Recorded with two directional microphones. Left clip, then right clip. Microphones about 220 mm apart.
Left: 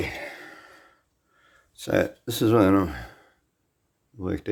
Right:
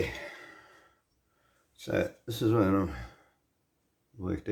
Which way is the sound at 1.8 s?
55° left (ahead or behind).